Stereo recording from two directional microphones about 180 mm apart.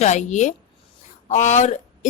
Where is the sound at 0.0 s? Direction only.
40° left (ahead or behind).